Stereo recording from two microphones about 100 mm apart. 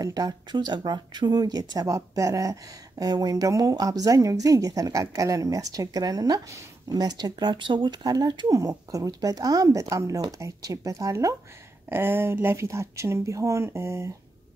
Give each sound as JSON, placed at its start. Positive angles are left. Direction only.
{"t": 0.0, "sound": "speech", "side_deg": -40}
{"t": 11.9, "sound": "speech", "side_deg": -25}